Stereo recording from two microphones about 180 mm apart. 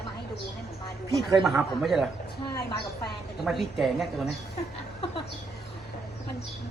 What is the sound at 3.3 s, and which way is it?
Speech, centre (ahead or behind).